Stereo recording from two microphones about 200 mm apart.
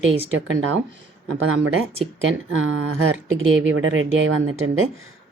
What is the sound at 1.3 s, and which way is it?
Speech, 90° right.